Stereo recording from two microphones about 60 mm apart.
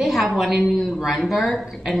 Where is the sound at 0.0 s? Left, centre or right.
Centre.